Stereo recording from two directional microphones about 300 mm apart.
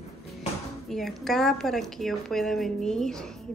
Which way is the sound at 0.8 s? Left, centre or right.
Centre.